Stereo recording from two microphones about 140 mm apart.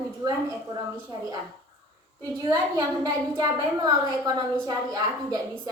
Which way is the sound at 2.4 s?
25° right (ahead or behind).